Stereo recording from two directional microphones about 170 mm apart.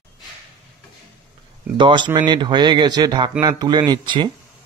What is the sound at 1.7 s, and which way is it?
Speech, 30° right (ahead or behind).